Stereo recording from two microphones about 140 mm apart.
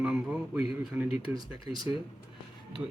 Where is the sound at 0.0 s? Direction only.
10° right (ahead or behind).